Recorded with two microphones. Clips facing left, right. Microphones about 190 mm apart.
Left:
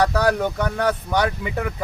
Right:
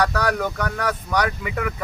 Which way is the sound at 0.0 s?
25° left (ahead or behind).